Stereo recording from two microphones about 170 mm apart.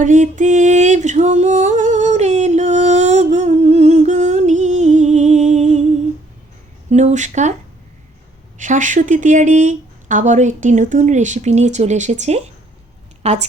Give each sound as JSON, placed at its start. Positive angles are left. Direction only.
{"t": 0.0, "sound": "a sound", "side_deg": -50}
{"t": 6.9, "sound": "speech", "side_deg": -45}
{"t": 8.5, "sound": "a woman's voice", "side_deg": -50}